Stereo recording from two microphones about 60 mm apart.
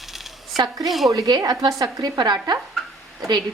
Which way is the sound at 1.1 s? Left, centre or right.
Right.